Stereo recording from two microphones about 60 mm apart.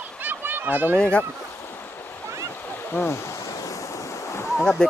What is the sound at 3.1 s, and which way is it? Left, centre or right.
Waves, left.